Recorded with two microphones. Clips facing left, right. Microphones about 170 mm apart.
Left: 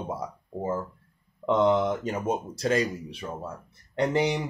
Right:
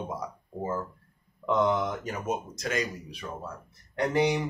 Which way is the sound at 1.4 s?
25° left (ahead or behind).